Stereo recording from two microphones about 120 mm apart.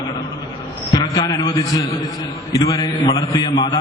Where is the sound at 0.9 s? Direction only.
35° left (ahead or behind).